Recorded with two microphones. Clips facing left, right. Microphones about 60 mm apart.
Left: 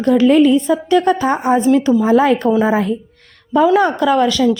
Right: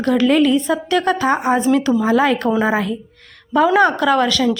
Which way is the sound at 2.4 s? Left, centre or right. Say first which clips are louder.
Left 3 dB; centre.